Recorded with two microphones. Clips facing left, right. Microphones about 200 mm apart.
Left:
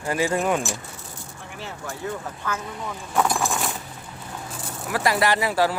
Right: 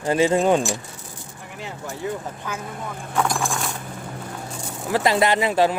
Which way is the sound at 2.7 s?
55° right (ahead or behind).